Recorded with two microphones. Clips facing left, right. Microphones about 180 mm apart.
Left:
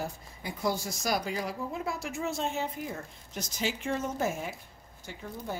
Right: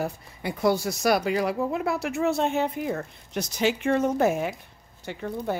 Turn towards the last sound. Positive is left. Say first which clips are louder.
# right 9 dB
turn(degrees=-65)  # may be behind; listen again after turning